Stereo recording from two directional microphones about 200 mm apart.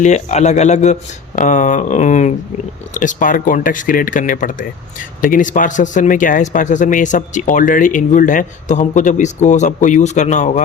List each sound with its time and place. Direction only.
0.0 s a man's voice: 35° left (ahead or behind)